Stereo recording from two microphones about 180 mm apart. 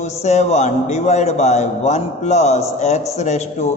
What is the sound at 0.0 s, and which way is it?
A man's voice, 40° left (ahead or behind).